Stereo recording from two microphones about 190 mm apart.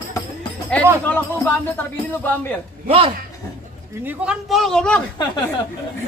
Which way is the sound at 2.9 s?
30° right (ahead or behind).